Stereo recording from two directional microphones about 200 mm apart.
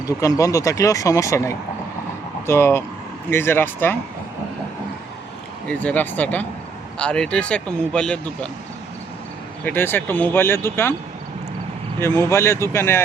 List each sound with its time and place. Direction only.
0.2 s speech: 15° left (ahead or behind)
5.6 s speech: 5° left (ahead or behind)
9.6 s speech: 10° left (ahead or behind)
11.9 s speech: 10° left (ahead or behind)